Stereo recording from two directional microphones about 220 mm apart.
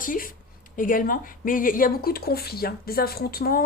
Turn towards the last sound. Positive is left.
turn(degrees=40)  # may be behind; listen again after turning